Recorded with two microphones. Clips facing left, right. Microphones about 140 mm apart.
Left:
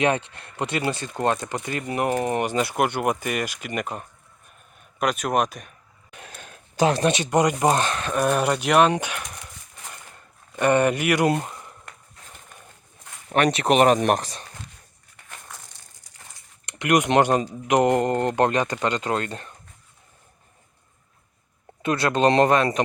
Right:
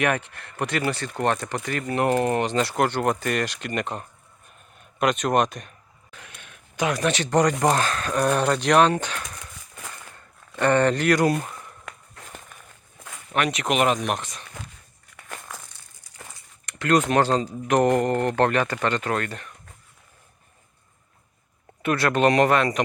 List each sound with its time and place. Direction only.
0.0 s speech: 20° left (ahead or behind); by 5.7 s 5° left (ahead or behind)
6.3 s a sound: 35° left (ahead or behind)
7.1 s speech: 15° left (ahead or behind)
8.0 s speech: 5° left (ahead or behind)
10.5 s speech: 15° left (ahead or behind)
11.3 s a sound: 20° left (ahead or behind)
13.3 s speech: 35° left (ahead or behind)
15.1 s a sound: 90° right
16.6 s speech: 20° left (ahead or behind)
21.8 s speech: 15° left (ahead or behind)